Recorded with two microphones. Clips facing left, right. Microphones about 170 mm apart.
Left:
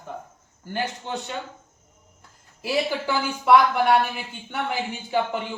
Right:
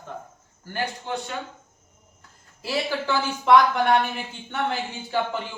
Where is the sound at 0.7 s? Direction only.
20° left (ahead or behind).